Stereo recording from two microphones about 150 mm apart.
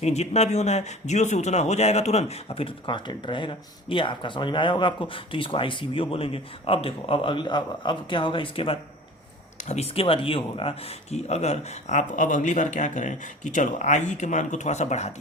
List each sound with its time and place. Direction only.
0.0 s speech: 45° left (ahead or behind)
9.6 s speech: 50° left (ahead or behind)